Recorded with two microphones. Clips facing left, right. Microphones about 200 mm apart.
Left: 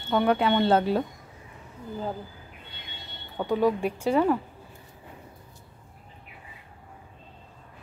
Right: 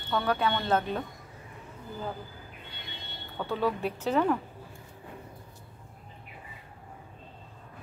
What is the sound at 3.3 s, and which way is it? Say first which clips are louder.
Speech: left 6 dB; 15° left (ahead or behind).